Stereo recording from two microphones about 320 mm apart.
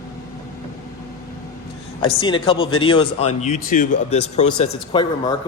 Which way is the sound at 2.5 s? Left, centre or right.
Left.